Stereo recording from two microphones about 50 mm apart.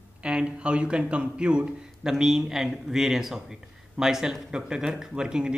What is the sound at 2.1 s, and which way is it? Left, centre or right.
Speech, centre.